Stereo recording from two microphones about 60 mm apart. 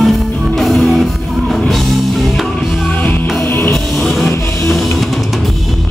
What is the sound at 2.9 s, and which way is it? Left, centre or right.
Music, left.